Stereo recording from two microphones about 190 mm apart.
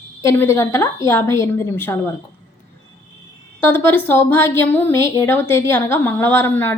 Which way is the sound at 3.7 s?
10° left (ahead or behind).